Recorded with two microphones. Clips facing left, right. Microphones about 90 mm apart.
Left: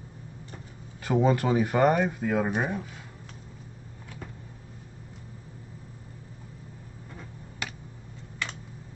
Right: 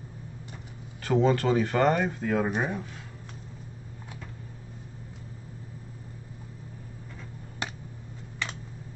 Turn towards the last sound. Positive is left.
turn(degrees=-30)  # may be behind; listen again after turning